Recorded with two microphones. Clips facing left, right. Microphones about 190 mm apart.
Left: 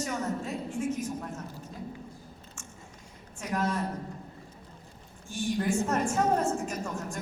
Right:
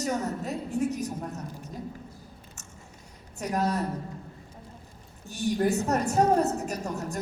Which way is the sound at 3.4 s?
40° right (ahead or behind).